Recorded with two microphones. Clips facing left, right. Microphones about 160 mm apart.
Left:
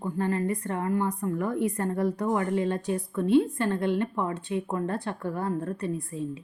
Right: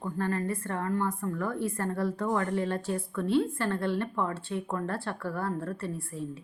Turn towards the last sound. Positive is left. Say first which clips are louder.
# left 4 dB
turn(degrees=20)  # may be behind; listen again after turning